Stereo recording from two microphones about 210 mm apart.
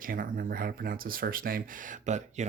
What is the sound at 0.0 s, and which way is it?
Speech, 40° right (ahead or behind).